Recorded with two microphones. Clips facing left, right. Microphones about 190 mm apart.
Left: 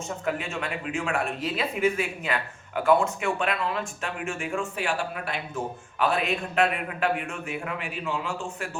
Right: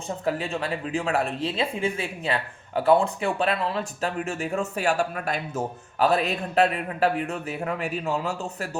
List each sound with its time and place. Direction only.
0.3 s speech: 35° right (ahead or behind)